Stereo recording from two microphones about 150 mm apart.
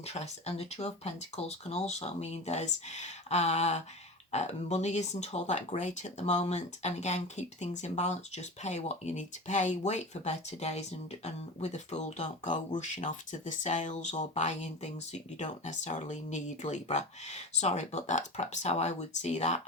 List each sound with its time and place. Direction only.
0.0 s speech: 45° left (ahead or behind)